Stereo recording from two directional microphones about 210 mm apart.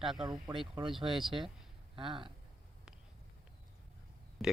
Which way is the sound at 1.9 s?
25° right (ahead or behind).